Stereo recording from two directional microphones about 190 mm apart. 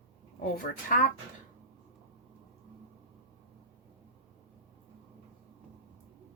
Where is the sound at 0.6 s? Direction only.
50° left (ahead or behind).